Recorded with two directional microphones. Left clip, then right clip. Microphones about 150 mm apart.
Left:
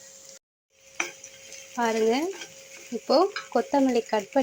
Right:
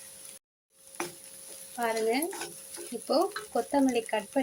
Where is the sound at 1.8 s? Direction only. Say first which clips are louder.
Left 5 dB; 10° left (ahead or behind).